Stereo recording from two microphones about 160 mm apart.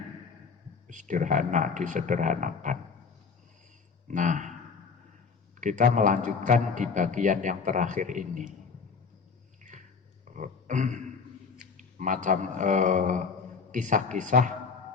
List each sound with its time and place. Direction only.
0.9 s a man's voice: 50° right (ahead or behind)
4.1 s speech: 50° right (ahead or behind)
5.5 s a man's voice: 50° right (ahead or behind)
9.7 s dog: 55° right (ahead or behind)
10.3 s a sound: 50° right (ahead or behind)
11.8 s a man's voice: 50° right (ahead or behind)